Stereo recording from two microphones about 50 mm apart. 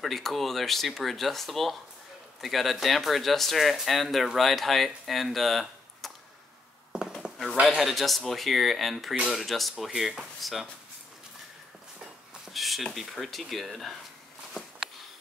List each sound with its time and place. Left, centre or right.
0.0 s speech: centre
6.9 s a sound: centre
7.6 s speech: centre
12.4 s speech: centre